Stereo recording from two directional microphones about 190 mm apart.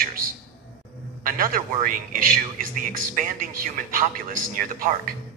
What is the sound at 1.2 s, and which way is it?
A man's voice, 45° right (ahead or behind).